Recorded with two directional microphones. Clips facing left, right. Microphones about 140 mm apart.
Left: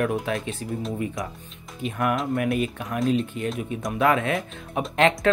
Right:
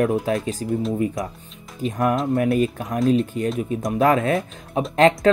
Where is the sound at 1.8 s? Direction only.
35° right (ahead or behind).